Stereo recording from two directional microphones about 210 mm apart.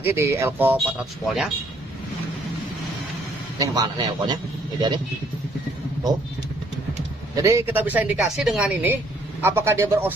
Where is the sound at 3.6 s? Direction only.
15° right (ahead or behind).